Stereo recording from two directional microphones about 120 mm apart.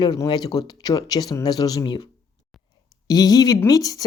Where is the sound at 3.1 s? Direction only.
35° left (ahead or behind).